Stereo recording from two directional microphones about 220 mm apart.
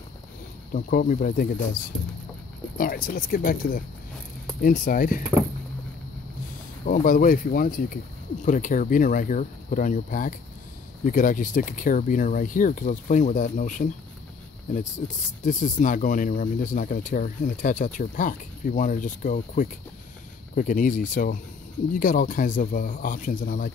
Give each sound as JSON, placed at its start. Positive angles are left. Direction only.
{"t": 0.7, "sound": "speech", "side_deg": 40}
{"t": 2.8, "sound": "speech", "side_deg": 40}
{"t": 6.9, "sound": "speech", "side_deg": 40}
{"t": 15.4, "sound": "speech", "side_deg": 35}